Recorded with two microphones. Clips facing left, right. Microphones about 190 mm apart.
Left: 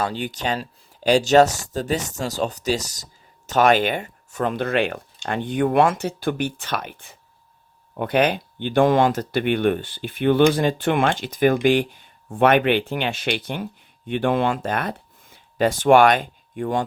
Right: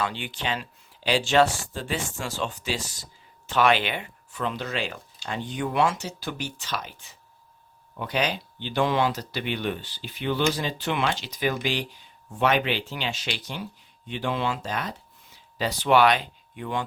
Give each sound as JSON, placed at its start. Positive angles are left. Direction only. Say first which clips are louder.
{"t": 0.0, "sound": "speech", "louder": "left 5 dB", "side_deg": 40}